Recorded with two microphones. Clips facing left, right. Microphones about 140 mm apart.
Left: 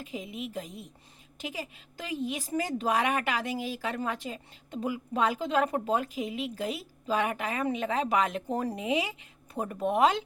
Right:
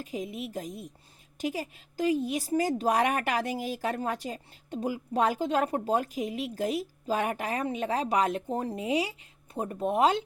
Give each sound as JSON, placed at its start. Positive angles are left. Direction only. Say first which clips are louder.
{"t": 0.0, "sound": "a woman's voice", "louder": "right 2 dB", "side_deg": -40}